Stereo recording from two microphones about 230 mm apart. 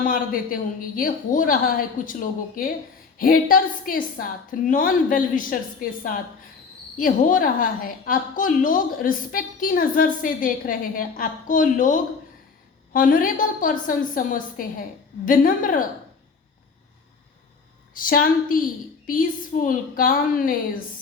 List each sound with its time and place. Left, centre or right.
0.0 s a woman's voice: left
17.9 s a woman's voice: left